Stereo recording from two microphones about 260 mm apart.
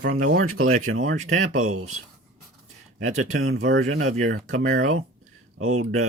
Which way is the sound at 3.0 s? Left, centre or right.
Right.